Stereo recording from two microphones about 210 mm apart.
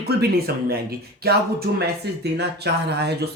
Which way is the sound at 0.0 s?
50° right (ahead or behind).